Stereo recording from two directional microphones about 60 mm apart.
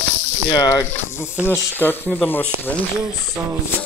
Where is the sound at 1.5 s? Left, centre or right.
Left.